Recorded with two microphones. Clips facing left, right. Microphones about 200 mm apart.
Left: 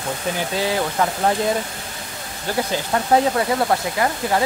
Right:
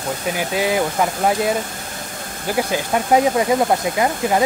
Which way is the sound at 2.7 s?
15° right (ahead or behind).